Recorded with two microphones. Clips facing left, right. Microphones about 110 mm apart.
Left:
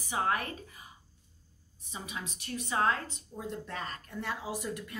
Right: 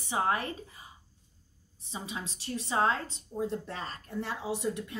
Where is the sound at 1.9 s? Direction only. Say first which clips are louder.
Right 2 dB; 30° right (ahead or behind).